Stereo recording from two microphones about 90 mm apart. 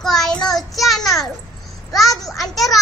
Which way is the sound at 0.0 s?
5° left (ahead or behind).